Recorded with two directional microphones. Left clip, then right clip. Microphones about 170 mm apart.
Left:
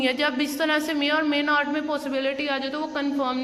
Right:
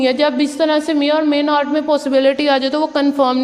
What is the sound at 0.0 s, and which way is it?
A woman's voice, 25° right (ahead or behind).